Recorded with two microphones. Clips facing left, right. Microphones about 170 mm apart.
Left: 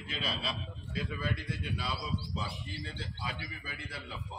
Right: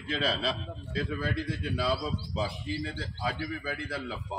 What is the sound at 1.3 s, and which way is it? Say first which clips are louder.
Speech: right 6 dB; 90° right.